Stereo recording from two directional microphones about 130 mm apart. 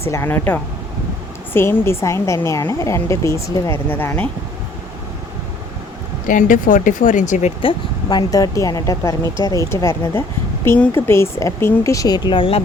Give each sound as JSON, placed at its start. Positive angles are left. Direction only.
{"t": 0.0, "sound": "a woman's voice", "side_deg": 20}
{"t": 6.2, "sound": "speech", "side_deg": 90}
{"t": 7.6, "sound": "speech", "side_deg": 40}
{"t": 8.3, "sound": "a woman's voice", "side_deg": 25}